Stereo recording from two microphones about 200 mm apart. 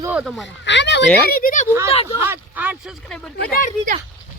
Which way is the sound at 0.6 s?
60° left (ahead or behind).